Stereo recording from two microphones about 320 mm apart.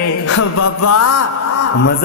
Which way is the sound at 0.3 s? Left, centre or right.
Left.